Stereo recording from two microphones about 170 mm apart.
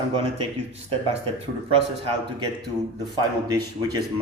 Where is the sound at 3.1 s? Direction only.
25° right (ahead or behind).